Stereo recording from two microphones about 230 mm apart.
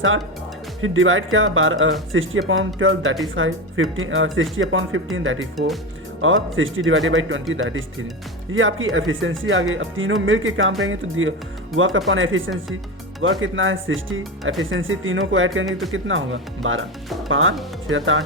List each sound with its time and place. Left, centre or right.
0.8 s speech: right
5.5 s speech: centre
6.2 s speech: right